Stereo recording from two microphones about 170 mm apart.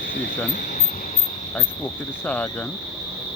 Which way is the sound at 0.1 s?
60° left (ahead or behind).